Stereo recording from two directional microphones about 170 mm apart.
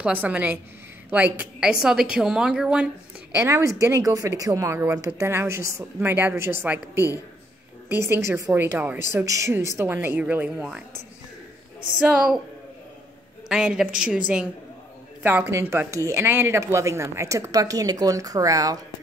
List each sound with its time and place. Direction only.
0.0 s a woman's voice: 10° right (ahead or behind)
3.4 s a woman's voice: 20° right (ahead or behind)
12.0 s a woman's voice: 5° right (ahead or behind)
13.5 s a woman's voice: 5° right (ahead or behind); by 18.8 s 20° right (ahead or behind)